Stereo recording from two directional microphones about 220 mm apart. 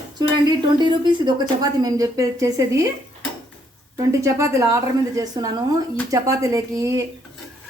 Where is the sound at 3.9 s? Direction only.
15° right (ahead or behind).